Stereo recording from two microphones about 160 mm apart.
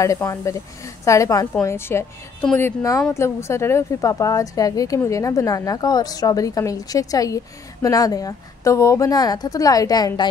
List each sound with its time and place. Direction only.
0.0 s a woman's voice: 20° left (ahead or behind)